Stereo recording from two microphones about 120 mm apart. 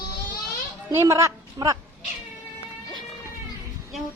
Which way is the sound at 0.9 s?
20° right (ahead or behind).